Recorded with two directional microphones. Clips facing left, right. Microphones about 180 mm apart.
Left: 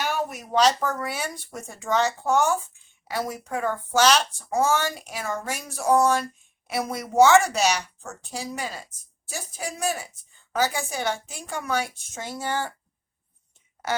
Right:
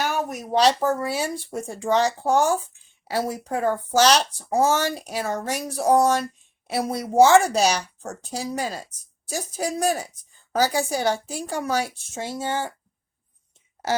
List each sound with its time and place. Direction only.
0.0 s a woman's voice: 40° right (ahead or behind); by 12.7 s 20° right (ahead or behind)